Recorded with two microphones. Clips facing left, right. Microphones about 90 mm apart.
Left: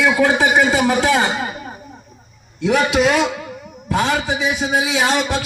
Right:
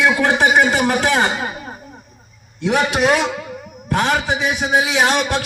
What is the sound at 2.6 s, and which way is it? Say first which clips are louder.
A man's voice: left 1 dB; 50° right (ahead or behind).